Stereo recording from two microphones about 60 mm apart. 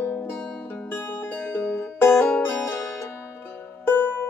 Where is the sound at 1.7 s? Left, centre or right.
Left.